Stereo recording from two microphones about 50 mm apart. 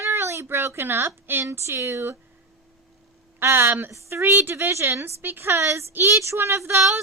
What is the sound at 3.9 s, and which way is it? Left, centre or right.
A woman's voice, right.